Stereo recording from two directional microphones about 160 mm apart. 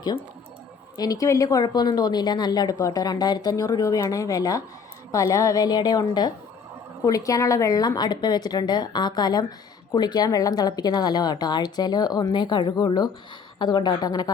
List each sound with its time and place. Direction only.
0.9 s a woman's voice: 25° left (ahead or behind)